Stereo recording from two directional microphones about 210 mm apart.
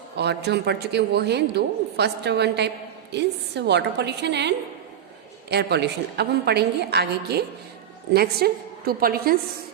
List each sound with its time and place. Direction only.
0.2 s a man's voice: 55° right (ahead or behind)